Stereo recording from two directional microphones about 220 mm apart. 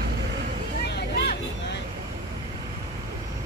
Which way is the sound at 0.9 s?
50° left (ahead or behind).